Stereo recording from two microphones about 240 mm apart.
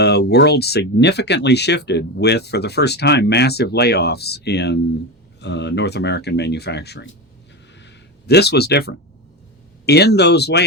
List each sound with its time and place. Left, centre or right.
0.0 s speech: left
7.8 s a sound: left
9.8 s speech: left